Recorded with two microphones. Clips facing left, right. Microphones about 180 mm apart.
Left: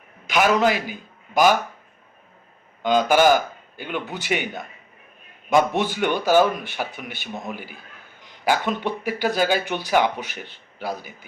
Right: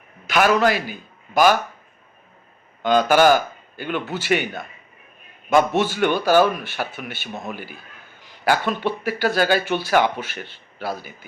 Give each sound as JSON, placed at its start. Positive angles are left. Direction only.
{"t": 0.3, "sound": "a man's voice", "side_deg": 15}
{"t": 2.8, "sound": "speech", "side_deg": 15}